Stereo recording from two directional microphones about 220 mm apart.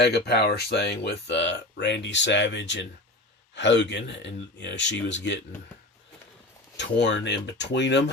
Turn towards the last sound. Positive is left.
turn(degrees=55)  # may be behind; listen again after turning